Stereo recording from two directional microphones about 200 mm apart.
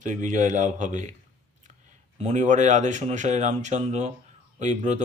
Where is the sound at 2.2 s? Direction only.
35° right (ahead or behind).